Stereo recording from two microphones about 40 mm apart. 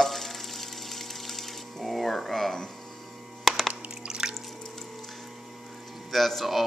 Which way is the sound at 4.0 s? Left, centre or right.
Centre.